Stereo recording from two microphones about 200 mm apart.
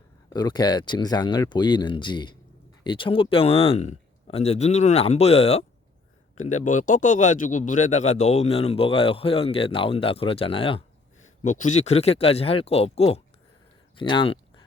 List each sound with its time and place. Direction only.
0.3 s speech: 20° left (ahead or behind)